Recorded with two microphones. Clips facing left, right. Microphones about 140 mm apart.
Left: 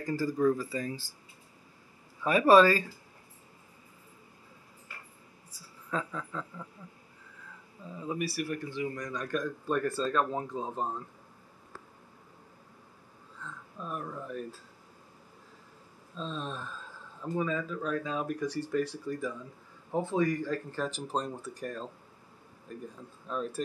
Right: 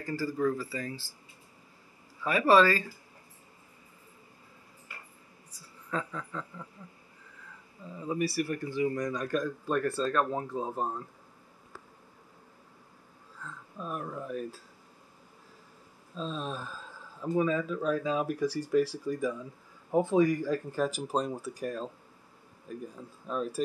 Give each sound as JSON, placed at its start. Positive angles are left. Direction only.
{"t": 0.0, "sound": "speech", "side_deg": 20}
{"t": 2.2, "sound": "speech", "side_deg": 15}
{"t": 5.5, "sound": "a woman's voice", "side_deg": 5}
{"t": 8.0, "sound": "speech", "side_deg": 10}
{"t": 8.6, "sound": "speech", "side_deg": -10}
{"t": 13.4, "sound": "speech", "side_deg": -5}
{"t": 16.2, "sound": "speech", "side_deg": -5}